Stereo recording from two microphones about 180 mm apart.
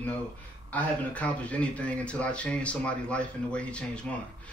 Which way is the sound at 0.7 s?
10° left (ahead or behind).